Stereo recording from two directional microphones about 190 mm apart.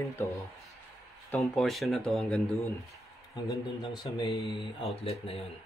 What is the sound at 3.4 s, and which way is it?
A man's voice, 20° left (ahead or behind).